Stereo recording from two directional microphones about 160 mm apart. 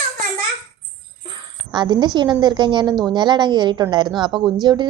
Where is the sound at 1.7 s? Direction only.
30° right (ahead or behind).